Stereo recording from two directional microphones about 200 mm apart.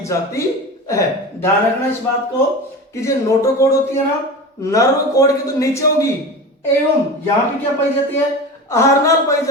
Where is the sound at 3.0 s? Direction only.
15° left (ahead or behind).